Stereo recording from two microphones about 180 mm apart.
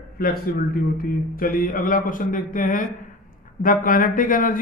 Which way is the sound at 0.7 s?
50° left (ahead or behind).